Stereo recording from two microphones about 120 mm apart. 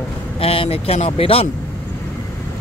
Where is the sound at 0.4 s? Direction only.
50° left (ahead or behind).